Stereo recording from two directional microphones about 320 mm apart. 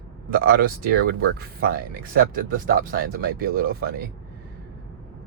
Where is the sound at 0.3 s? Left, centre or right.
Right.